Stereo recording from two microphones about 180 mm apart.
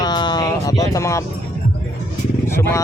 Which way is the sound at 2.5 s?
15° left (ahead or behind).